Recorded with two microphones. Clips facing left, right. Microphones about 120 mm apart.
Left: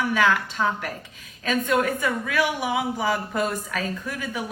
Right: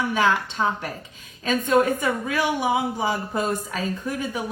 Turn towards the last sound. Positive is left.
turn(degrees=-30)  # may be behind; listen again after turning